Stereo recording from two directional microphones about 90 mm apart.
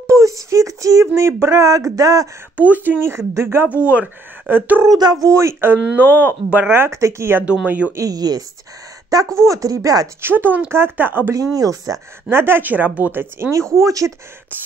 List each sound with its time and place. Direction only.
0.1 s a sound: 35° right (ahead or behind)
2.5 s speech: 15° right (ahead or behind)
4.8 s speech: 45° right (ahead or behind)
5.2 s speech: 30° right (ahead or behind)
7.4 s speech: 15° right (ahead or behind)
7.9 s speech: 40° right (ahead or behind)
10.2 s speech: 20° right (ahead or behind)
11.3 s speech: 40° right (ahead or behind)
12.3 s speech: 25° right (ahead or behind)